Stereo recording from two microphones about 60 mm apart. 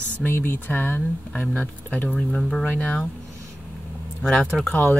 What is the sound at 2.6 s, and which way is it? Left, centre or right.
Speech, centre.